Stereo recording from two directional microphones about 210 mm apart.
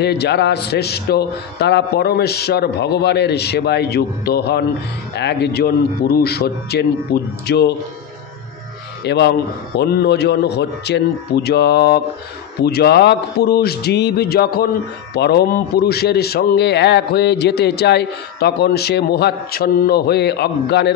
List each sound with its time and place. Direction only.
0.0 s a man's voice: 50° left (ahead or behind)
9.0 s a man's voice: 55° left (ahead or behind)